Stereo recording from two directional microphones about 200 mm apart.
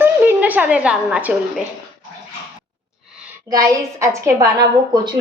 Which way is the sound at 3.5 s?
15° right (ahead or behind).